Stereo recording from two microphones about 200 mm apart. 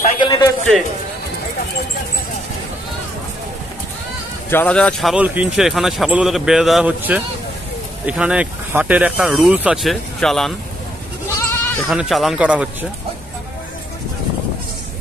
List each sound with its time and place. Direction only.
0.2 s a sound: 25° left (ahead or behind)
4.5 s speech: 10° left (ahead or behind)
11.3 s goat: 15° left (ahead or behind)
11.9 s speech: centre (ahead or behind)